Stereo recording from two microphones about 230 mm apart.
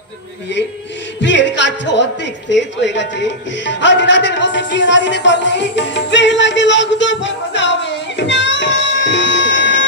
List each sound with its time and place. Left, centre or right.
1.2 s a woman's voice: left